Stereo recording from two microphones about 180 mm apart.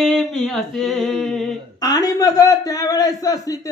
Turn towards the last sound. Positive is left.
turn(degrees=20)  # may be behind; listen again after turning